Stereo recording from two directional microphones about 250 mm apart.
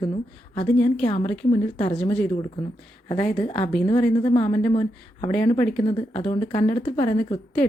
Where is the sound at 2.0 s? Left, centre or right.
Centre.